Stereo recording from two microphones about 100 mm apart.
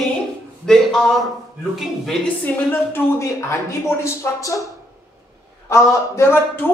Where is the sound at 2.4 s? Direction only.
20° left (ahead or behind).